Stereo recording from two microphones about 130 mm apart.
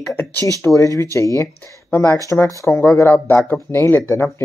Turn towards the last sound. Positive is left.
turn(degrees=20)  # may be behind; listen again after turning